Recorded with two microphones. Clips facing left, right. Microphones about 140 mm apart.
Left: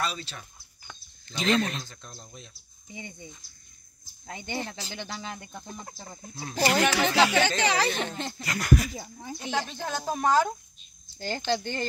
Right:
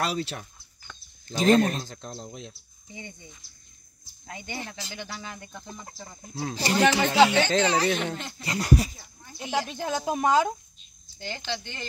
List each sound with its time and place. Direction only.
0.0 s speech: 80° right
1.3 s speech: 45° right (ahead or behind)
1.9 s speech: 80° right
2.9 s speech: 15° left (ahead or behind)
4.3 s speech: 25° left (ahead or behind)
5.5 s speech: 15° left (ahead or behind)
6.8 s speech: 25° right (ahead or behind)
7.4 s speech: 90° left
8.0 s speech: 30° left (ahead or behind)
8.4 s speech: 30° right (ahead or behind)
8.9 s speech: 90° left
9.4 s speech: 10° right (ahead or behind)
11.1 s speech: 40° left (ahead or behind)